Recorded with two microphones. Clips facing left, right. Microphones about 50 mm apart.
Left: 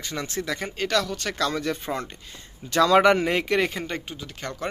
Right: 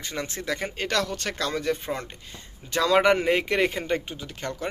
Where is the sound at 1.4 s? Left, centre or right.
Centre.